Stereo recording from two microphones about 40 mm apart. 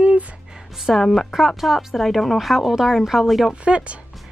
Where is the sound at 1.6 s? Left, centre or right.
Centre.